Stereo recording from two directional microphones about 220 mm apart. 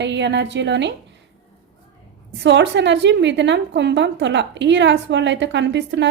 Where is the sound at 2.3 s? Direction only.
55° right (ahead or behind).